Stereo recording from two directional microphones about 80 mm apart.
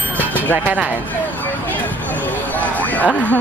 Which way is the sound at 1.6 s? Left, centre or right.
Left.